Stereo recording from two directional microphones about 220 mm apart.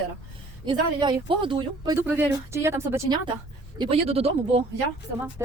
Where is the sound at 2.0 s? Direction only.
10° right (ahead or behind).